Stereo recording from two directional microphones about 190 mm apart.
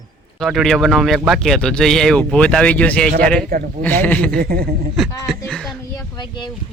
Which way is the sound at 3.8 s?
10° left (ahead or behind).